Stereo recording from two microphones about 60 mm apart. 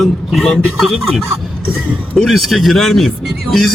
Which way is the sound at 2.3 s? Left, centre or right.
Centre.